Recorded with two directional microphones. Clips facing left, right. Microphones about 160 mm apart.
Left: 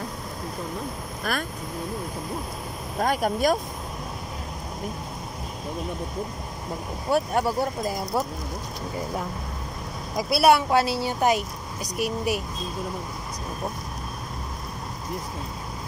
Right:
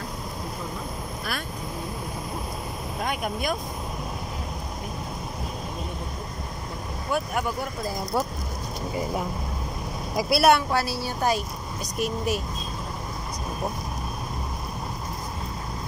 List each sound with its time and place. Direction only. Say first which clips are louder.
1.3 s speech: left 6 dB; 45° left (ahead or behind)
3.0 s speech: left 6 dB; 40° left (ahead or behind)
7.1 s speech: left 4 dB; 30° left (ahead or behind)
10.1 s speech: left 1 dB; centre (ahead or behind)
10.7 s speech: left 4 dB; 20° left (ahead or behind)